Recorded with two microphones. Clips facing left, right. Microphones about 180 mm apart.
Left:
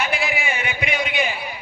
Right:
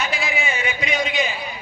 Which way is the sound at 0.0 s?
60° left (ahead or behind).